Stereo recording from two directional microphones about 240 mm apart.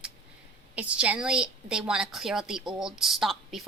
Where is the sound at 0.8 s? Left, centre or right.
Centre.